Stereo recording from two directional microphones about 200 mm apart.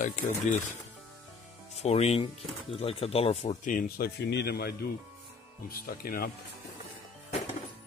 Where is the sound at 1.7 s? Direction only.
30° left (ahead or behind); by 6.3 s 45° left (ahead or behind).